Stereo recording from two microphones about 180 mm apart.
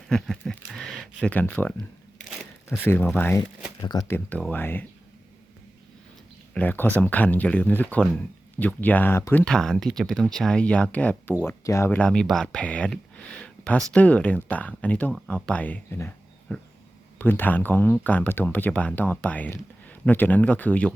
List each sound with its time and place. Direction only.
0.1 s a sound: centre (ahead or behind)
2.8 s speech: 10° left (ahead or behind)
4.3 s speech: 5° left (ahead or behind)
6.5 s speech: 10° left (ahead or behind)
13.4 s a sound: 5° left (ahead or behind)
13.9 s speech: 5° left (ahead or behind)